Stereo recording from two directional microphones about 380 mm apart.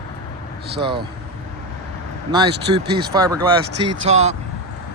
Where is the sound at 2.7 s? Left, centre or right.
Right.